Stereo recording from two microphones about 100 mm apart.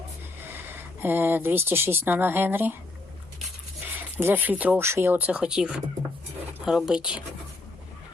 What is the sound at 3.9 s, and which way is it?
Speech, 20° right (ahead or behind).